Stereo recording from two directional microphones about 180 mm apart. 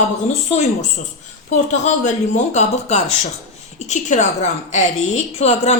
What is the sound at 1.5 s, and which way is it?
A woman's voice, 40° left (ahead or behind).